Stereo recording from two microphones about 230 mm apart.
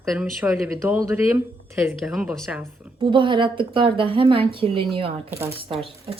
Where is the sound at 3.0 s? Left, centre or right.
Right.